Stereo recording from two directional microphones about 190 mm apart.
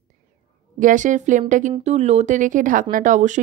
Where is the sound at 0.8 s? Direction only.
40° right (ahead or behind).